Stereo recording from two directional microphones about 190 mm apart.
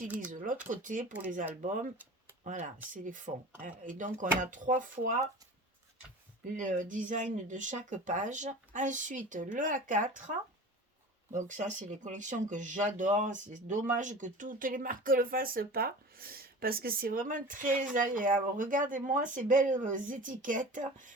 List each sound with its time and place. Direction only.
0.3 s speech: 45° right (ahead or behind)
2.4 s speech: 40° right (ahead or behind)
6.6 s speech: 40° right (ahead or behind)